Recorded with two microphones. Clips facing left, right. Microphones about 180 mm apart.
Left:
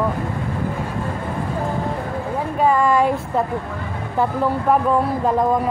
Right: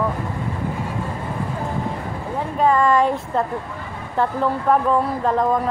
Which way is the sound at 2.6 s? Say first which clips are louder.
Even; 5° left (ahead or behind).